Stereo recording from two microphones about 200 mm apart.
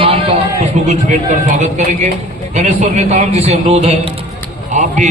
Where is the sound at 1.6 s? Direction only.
35° right (ahead or behind).